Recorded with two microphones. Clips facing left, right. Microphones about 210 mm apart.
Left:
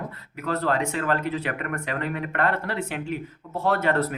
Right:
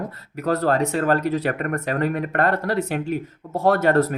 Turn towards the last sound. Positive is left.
turn(degrees=-45)  # may be behind; listen again after turning